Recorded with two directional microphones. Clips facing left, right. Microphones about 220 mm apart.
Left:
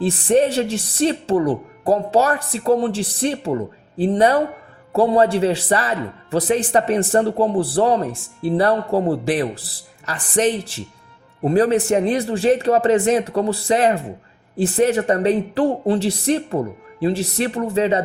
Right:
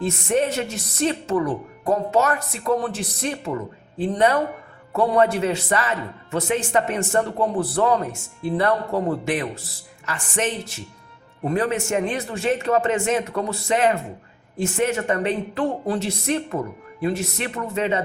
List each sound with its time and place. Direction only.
0.0 s a woman's voice: 30° left (ahead or behind)